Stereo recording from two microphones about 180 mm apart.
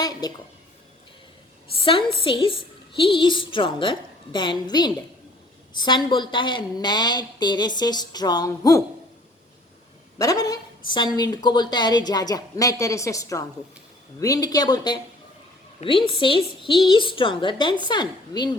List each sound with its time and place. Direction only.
0.0 s a sound: 20° left (ahead or behind)
1.8 s a woman's voice: 30° left (ahead or behind)
10.2 s a woman's voice: 20° left (ahead or behind)